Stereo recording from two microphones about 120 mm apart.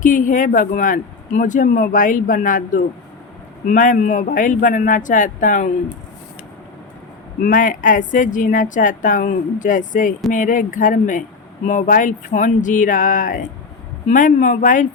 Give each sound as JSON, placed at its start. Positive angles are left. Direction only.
{"t": 0.0, "sound": "a man's voice", "side_deg": 90}
{"t": 7.4, "sound": "a man's voice", "side_deg": 90}